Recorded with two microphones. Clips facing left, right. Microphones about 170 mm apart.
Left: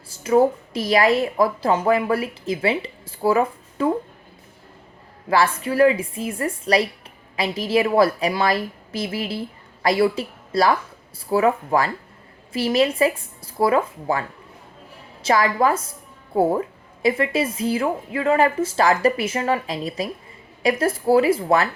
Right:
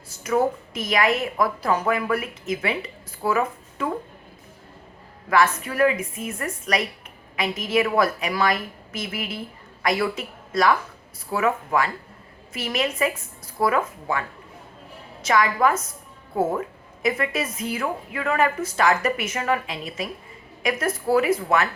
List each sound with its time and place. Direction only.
0.1 s a woman's voice: 30° left (ahead or behind)
5.3 s a woman's voice: 30° left (ahead or behind)